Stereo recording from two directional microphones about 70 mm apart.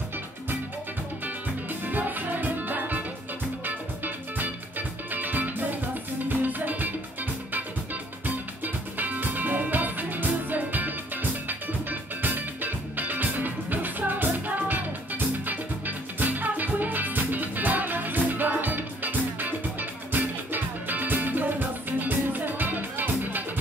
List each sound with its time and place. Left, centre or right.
1.2 s music: right
8.6 s music: right